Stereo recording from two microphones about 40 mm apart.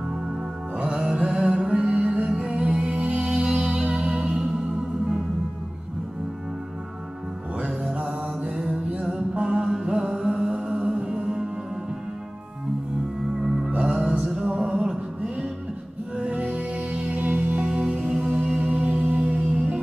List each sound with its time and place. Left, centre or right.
0.9 s music: right
7.9 s mantra: right
9.3 s music: right
13.7 s music: centre
17.2 s music: right
17.6 s music: right